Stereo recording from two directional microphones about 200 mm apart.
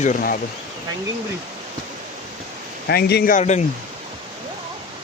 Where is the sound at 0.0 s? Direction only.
40° left (ahead or behind).